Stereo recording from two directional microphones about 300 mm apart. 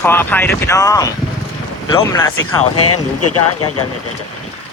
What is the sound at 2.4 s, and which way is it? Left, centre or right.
Speech, left.